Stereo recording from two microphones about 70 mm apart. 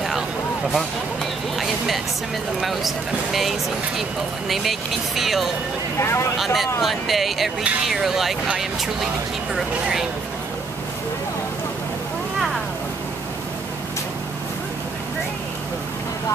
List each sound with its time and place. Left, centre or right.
0.7 s vehicle: centre
2.6 s speech: centre
4.5 s speech: centre
5.9 s speech: left
6.3 s speech: centre